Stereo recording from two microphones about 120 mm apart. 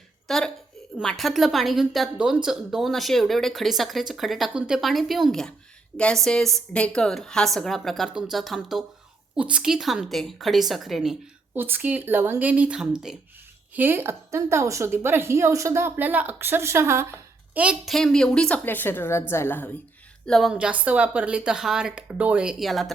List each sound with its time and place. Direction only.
0.3 s a woman's voice: 5° left (ahead or behind)
11.5 s speech: 15° right (ahead or behind)
13.7 s a woman's voice: 15° right (ahead or behind)
17.5 s a woman's voice: 10° right (ahead or behind)
17.8 s a woman's voice: 5° left (ahead or behind)
20.2 s a woman's voice: 5° left (ahead or behind)
20.5 s speech: 10° right (ahead or behind)